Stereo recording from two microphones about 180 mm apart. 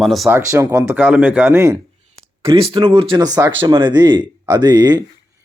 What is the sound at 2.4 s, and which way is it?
Speech, 30° right (ahead or behind).